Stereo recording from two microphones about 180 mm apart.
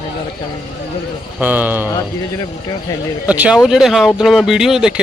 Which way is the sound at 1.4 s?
10° right (ahead or behind).